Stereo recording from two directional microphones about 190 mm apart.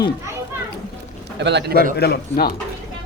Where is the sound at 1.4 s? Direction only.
65° right (ahead or behind).